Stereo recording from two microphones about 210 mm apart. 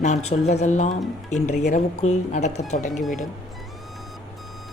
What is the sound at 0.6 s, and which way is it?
Speech, 35° left (ahead or behind).